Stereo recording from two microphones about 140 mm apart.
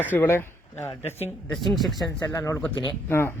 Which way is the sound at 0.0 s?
15° left (ahead or behind).